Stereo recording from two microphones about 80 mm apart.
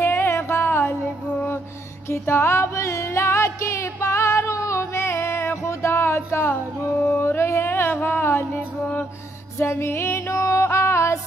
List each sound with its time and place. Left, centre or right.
0.0 s music: left
2.0 s music: left